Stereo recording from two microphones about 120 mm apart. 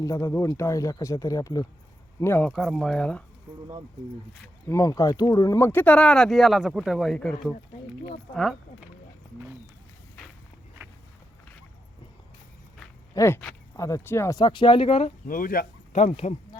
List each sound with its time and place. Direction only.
0.0 s speech: 25° left (ahead or behind)
2.4 s speech: centre (ahead or behind)
3.5 s speech: 20° right (ahead or behind)
4.7 s speech: 30° left (ahead or behind); by 7.5 s 5° left (ahead or behind)
13.1 s speech: 20° left (ahead or behind)
14.4 s speech: 40° left (ahead or behind)
15.9 s speech: 65° left (ahead or behind)